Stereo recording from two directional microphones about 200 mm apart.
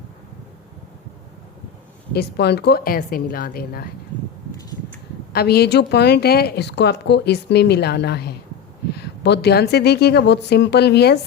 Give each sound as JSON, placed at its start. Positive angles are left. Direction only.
{"t": 2.1, "sound": "a woman's voice", "side_deg": 55}
{"t": 5.3, "sound": "a woman's voice", "side_deg": 50}